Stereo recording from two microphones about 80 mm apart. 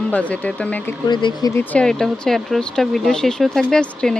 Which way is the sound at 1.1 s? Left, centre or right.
Left.